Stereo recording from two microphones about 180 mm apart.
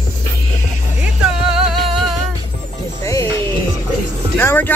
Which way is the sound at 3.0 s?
15° left (ahead or behind).